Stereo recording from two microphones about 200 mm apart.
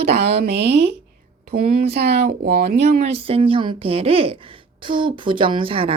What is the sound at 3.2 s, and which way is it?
A woman's voice, 25° right (ahead or behind).